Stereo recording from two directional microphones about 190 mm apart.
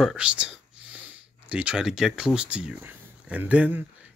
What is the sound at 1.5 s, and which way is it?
Speech, 5° right (ahead or behind).